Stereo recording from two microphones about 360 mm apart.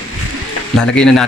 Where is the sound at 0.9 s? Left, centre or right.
Centre.